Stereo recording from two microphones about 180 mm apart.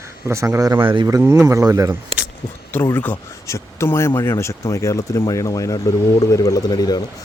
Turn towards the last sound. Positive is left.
turn(degrees=20)  # may be behind; listen again after turning